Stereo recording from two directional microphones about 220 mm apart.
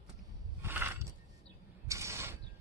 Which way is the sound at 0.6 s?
10° right (ahead or behind).